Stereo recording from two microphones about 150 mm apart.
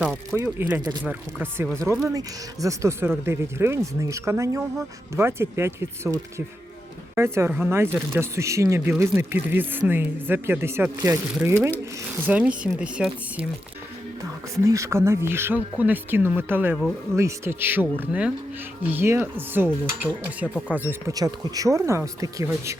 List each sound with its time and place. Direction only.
0.0 s speech: centre (ahead or behind)
14.2 s speech: 20° right (ahead or behind)
21.1 s speech: 25° right (ahead or behind)